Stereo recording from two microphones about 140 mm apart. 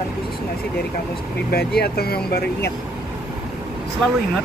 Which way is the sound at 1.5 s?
90° left.